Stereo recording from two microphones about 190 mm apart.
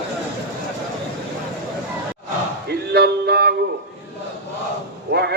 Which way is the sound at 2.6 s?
60° right (ahead or behind).